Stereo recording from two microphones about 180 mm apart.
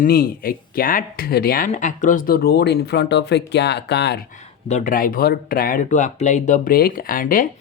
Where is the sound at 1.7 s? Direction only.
45° left (ahead or behind); by 4.2 s 70° left (ahead or behind).